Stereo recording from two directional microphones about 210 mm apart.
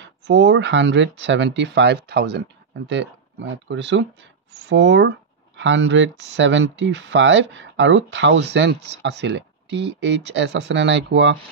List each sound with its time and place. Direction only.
0.0 s speech: 60° right (ahead or behind)